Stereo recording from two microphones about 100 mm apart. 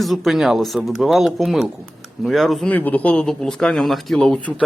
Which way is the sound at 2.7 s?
15° left (ahead or behind).